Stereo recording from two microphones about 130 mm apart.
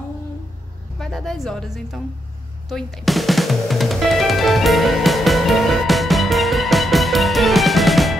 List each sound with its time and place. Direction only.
0.9 s speech: 5° left (ahead or behind)
2.7 s music: centre (ahead or behind)